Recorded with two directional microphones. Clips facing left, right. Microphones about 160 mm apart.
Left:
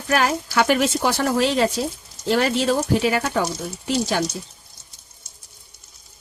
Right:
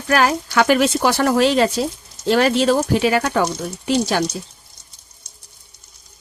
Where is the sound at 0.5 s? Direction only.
90° right.